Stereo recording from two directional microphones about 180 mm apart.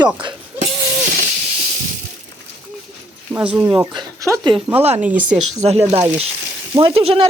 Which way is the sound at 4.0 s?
20° right (ahead or behind).